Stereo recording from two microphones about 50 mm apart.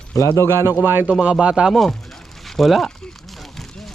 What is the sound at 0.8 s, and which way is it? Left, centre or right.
Speech, right.